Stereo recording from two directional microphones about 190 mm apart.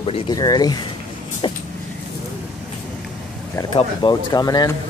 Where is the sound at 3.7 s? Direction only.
25° left (ahead or behind).